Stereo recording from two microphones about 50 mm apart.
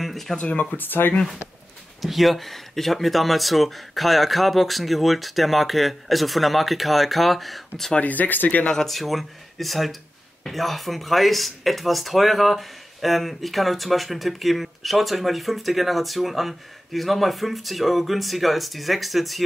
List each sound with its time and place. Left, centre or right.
0.0 s a sound: centre
0.4 s speech: left
0.7 s speech: left
2.0 s speech: centre
8.0 s speech: left
8.7 s speech: centre